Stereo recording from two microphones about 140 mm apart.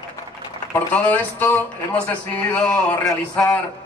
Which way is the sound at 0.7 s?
10° left (ahead or behind).